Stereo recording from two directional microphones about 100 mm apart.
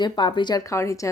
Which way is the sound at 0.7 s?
30° left (ahead or behind).